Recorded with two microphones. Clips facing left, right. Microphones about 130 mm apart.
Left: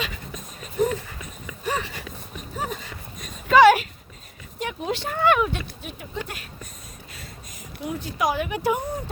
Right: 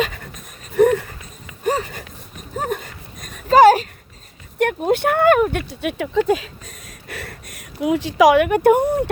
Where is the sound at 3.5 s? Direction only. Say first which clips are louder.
Right 4 dB; 40° right (ahead or behind).